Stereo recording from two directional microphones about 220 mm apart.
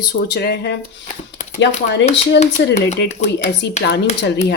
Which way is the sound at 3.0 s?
30° left (ahead or behind).